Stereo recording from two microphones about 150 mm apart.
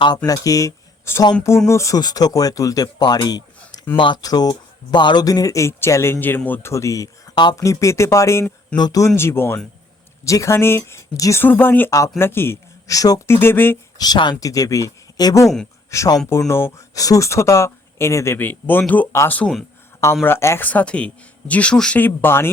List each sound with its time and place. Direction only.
0.3 s speech: 20° left (ahead or behind)
9.1 s speech: 15° left (ahead or behind)
14.0 s speech: 25° left (ahead or behind)